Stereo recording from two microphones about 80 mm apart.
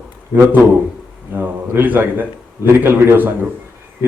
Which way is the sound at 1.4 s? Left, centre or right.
Right.